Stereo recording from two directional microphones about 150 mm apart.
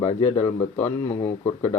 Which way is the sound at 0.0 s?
50° left (ahead or behind).